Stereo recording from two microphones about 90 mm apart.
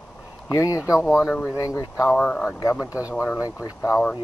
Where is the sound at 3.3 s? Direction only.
40° left (ahead or behind).